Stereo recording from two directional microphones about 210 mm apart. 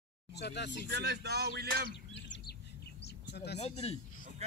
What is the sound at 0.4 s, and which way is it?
Speech, 55° left (ahead or behind).